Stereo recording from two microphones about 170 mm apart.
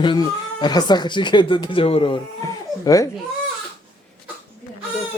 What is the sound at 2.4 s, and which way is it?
Baby cry, 20° left (ahead or behind).